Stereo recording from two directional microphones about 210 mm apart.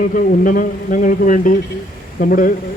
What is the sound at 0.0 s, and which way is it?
A man's voice, 40° left (ahead or behind).